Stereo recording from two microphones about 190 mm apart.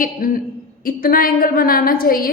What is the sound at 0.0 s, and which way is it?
A woman's voice, 50° left (ahead or behind).